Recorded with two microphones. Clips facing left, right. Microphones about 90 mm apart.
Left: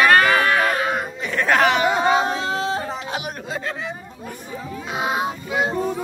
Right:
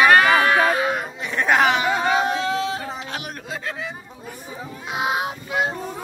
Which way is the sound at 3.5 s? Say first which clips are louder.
Left 2 dB; centre (ahead or behind).